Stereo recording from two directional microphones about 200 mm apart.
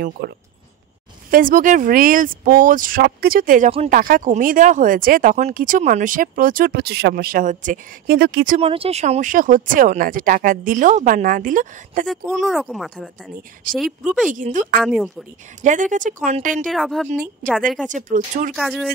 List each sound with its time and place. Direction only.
0.2 s speech: 50° right (ahead or behind)
8.5 s speech: 25° right (ahead or behind)
12.1 s speech: centre (ahead or behind)
13.6 s speech: 45° right (ahead or behind)
14.0 s speech: 5° right (ahead or behind)
14.3 s speech: 40° right (ahead or behind)
14.8 s speech: centre (ahead or behind)
15.6 s speech: 40° right (ahead or behind)
16.6 s speech: centre (ahead or behind)
17.8 s speech: 40° right (ahead or behind)
18.5 s speech: centre (ahead or behind)